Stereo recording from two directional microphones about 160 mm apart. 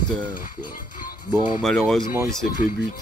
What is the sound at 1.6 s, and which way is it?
Speech, centre (ahead or behind).